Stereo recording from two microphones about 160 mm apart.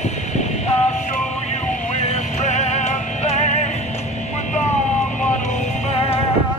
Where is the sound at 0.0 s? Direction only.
45° left (ahead or behind).